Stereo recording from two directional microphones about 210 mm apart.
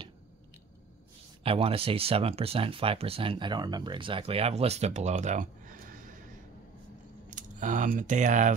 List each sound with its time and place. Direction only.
1.4 s speech: 25° right (ahead or behind)
7.2 s speech: 40° right (ahead or behind)